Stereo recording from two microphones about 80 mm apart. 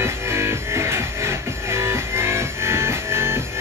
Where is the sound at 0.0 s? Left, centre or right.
Right.